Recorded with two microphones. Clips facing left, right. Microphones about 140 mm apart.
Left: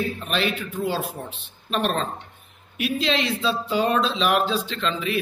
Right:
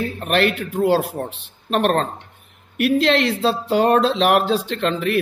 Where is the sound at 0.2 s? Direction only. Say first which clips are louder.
Right 6 dB; 70° right (ahead or behind).